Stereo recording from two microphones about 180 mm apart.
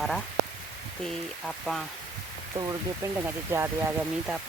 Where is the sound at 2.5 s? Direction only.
20° right (ahead or behind); by 4.4 s 5° right (ahead or behind).